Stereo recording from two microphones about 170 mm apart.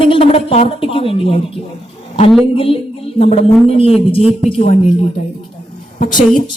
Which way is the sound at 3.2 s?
35° left (ahead or behind).